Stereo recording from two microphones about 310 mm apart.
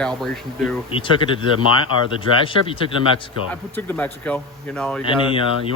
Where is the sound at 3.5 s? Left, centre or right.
Centre.